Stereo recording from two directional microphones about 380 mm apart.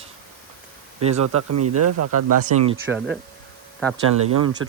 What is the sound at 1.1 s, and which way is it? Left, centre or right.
Speech, right.